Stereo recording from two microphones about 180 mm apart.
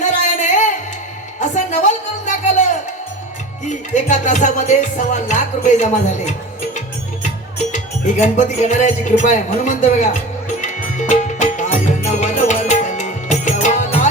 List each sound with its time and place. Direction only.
0.0 s music: 45° left (ahead or behind)
3.7 s music: 40° left (ahead or behind)
7.7 s speech: 40° left (ahead or behind)
10.8 s music: 40° left (ahead or behind)